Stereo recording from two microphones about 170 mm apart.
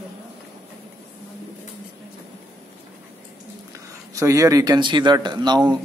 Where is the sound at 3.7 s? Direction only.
20° right (ahead or behind).